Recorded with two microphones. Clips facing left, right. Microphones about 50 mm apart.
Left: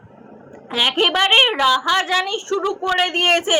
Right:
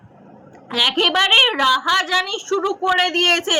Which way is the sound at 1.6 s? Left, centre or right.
Centre.